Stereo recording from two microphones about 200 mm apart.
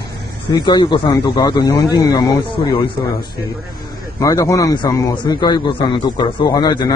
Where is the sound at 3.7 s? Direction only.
20° left (ahead or behind).